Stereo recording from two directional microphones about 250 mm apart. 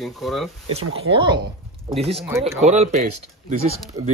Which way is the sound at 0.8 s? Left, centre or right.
Right.